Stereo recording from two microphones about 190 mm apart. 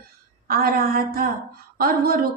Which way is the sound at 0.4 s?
50° right (ahead or behind).